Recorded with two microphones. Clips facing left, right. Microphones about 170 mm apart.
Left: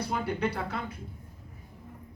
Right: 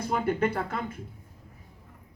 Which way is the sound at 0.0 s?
50° right (ahead or behind).